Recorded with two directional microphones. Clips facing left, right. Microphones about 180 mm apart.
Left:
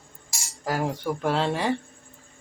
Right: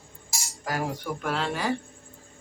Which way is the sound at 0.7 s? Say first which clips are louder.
Left 3 dB; 30° left (ahead or behind).